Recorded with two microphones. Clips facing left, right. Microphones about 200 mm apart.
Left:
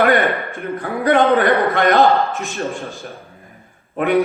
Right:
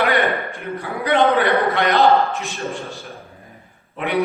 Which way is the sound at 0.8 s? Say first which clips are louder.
Left 3 dB; 50° left (ahead or behind).